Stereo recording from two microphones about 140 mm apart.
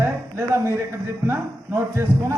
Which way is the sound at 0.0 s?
20° right (ahead or behind).